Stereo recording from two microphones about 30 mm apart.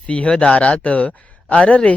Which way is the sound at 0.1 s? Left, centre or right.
Left.